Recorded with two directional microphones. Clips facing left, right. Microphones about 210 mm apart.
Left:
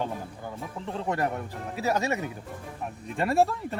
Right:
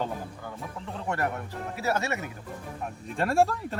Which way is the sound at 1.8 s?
15° left (ahead or behind).